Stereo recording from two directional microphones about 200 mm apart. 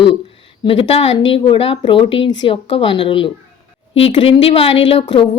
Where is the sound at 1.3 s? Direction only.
30° left (ahead or behind).